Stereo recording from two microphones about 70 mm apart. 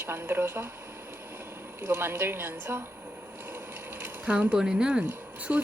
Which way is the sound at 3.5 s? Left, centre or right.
Right.